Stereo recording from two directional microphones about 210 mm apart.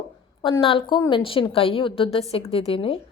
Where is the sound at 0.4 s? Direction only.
25° left (ahead or behind).